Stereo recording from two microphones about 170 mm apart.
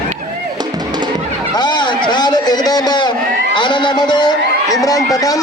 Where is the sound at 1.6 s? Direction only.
25° left (ahead or behind).